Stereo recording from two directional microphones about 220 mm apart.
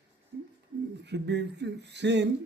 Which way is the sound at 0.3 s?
45° right (ahead or behind).